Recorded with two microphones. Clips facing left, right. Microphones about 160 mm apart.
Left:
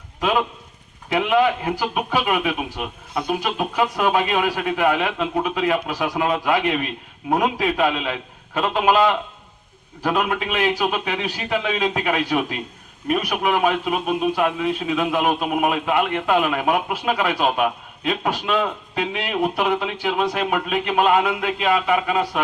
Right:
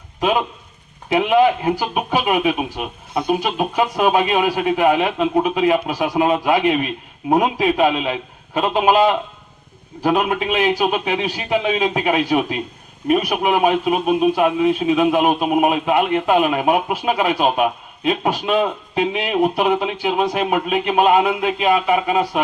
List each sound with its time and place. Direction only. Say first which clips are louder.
0.2 s speech: right 2 dB; 20° right (ahead or behind)